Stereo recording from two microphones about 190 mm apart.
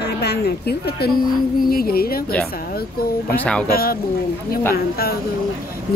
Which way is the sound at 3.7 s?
50° left (ahead or behind).